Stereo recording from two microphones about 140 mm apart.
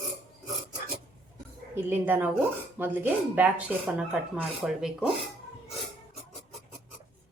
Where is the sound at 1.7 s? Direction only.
15° right (ahead or behind).